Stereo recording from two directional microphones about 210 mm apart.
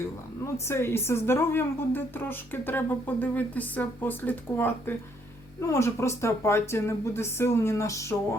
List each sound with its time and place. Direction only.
0.5 s a woman's voice: 10° left (ahead or behind)